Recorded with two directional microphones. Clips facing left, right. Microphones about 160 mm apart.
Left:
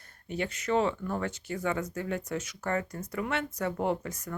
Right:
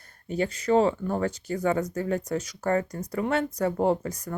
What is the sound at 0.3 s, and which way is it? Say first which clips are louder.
Speech: right 6 dB; 35° right (ahead or behind).